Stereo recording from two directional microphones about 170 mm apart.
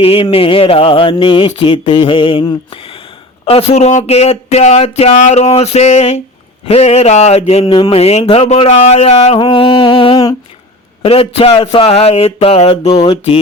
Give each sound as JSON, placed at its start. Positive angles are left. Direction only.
{"t": 0.0, "sound": "speech", "side_deg": 35}
{"t": 9.4, "sound": "a sound", "side_deg": 30}
{"t": 11.0, "sound": "speech", "side_deg": 35}